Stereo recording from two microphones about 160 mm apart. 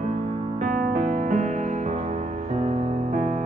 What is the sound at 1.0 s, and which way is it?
Music, 50° right (ahead or behind).